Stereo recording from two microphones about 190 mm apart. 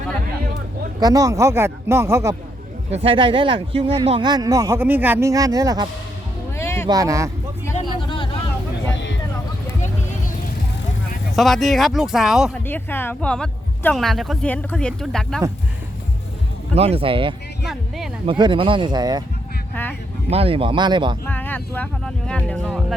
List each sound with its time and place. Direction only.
0.9 s speech: 20° right (ahead or behind)
2.9 s speech: 30° right (ahead or behind)
6.6 s a sound: 15° left (ahead or behind)
6.8 s speech: 20° right (ahead or behind)
7.9 s vehicle: 25° left (ahead or behind)
11.3 s speech: centre (ahead or behind)
12.6 s speech: 10° left (ahead or behind)
16.7 s speech: 30° right (ahead or behind)
17.7 s speech: centre (ahead or behind)
18.3 s speech: 25° right (ahead or behind)
19.7 s speech: 10° left (ahead or behind)
20.3 s speech: 30° right (ahead or behind)
21.2 s speech: 10° left (ahead or behind)